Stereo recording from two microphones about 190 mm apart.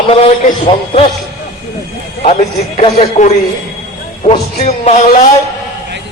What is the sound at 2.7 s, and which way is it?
Speech, 35° left (ahead or behind).